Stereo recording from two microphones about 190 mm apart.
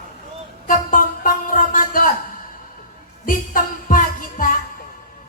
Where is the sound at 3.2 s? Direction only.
45° left (ahead or behind).